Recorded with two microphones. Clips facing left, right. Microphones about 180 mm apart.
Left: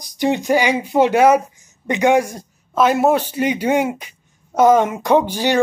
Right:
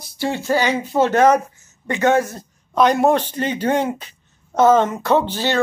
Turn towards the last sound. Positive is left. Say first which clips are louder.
# left 2 dB
turn(degrees=15)  # may be behind; listen again after turning